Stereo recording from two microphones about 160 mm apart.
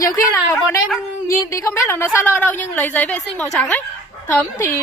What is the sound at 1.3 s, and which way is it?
A woman's voice, 20° left (ahead or behind).